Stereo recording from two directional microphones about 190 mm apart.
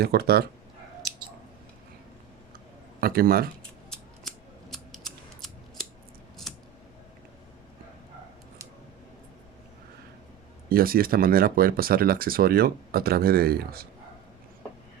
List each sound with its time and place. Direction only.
0.0 s speech: 55° right (ahead or behind)
3.0 s speech: 55° right (ahead or behind)
3.6 s scissors: centre (ahead or behind)
10.7 s speech: 50° right (ahead or behind)